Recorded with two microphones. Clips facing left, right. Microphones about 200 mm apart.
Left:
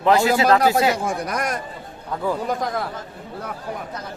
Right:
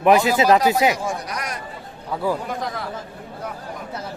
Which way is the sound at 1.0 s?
50° left (ahead or behind).